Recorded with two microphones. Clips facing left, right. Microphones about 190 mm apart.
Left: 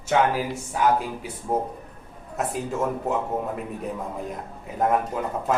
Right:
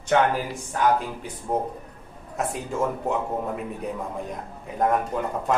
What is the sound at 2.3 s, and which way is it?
Speech, centre (ahead or behind).